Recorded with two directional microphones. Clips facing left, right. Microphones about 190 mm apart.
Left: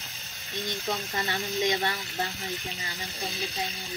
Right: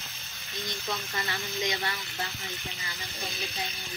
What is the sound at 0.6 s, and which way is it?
Speech, 35° left (ahead or behind).